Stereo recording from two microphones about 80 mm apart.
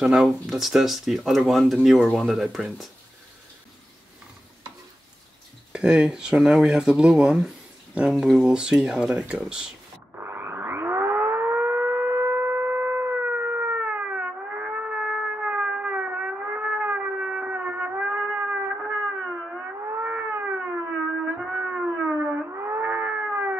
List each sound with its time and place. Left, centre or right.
0.0 s speech: centre
0.5 s speech: centre
5.7 s speech: centre
10.1 s civil defense siren: right
19.9 s a sound: right
21.8 s siren: centre
22.5 s cat: right